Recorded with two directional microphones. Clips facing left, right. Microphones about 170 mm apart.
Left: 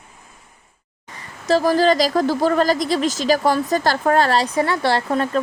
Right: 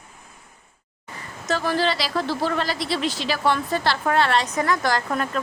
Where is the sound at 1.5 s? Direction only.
40° left (ahead or behind).